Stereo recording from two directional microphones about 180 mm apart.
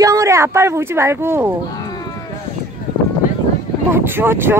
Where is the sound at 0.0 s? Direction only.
15° right (ahead or behind).